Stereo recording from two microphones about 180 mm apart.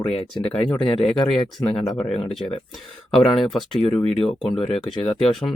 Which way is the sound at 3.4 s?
Centre (ahead or behind).